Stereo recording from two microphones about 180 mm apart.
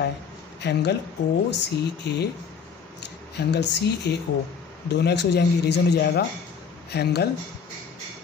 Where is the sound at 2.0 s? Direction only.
65° left (ahead or behind).